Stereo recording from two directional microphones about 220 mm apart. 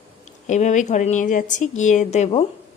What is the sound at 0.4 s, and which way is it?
A woman's voice, 35° left (ahead or behind).